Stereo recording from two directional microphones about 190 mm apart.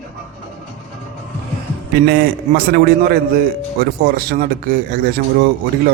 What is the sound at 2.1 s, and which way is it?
A man's voice, 55° right (ahead or behind).